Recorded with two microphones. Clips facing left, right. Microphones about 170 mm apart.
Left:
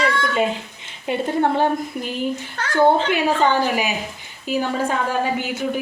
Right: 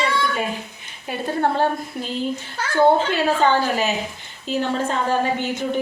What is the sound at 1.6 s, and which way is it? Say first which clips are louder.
Speech: left 2 dB; 15° left (ahead or behind).